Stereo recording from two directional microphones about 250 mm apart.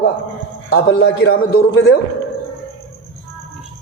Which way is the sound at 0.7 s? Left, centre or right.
Left.